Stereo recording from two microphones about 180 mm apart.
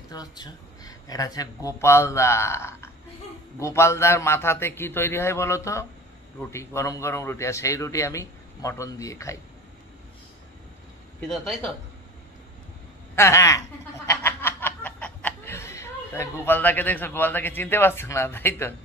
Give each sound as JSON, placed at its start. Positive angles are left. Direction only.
{"t": 0.1, "sound": "a man's voice", "side_deg": 20}
{"t": 11.1, "sound": "speech", "side_deg": 0}
{"t": 13.1, "sound": "speech", "side_deg": 15}
{"t": 14.0, "sound": "snicker", "side_deg": 10}